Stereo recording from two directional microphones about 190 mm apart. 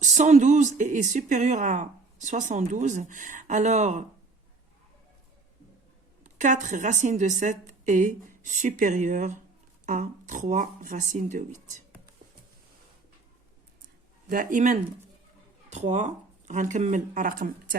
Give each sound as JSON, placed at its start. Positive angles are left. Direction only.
{"t": 0.0, "sound": "speech", "side_deg": -40}
{"t": 6.2, "sound": "speech", "side_deg": -40}
{"t": 14.3, "sound": "speech", "side_deg": -45}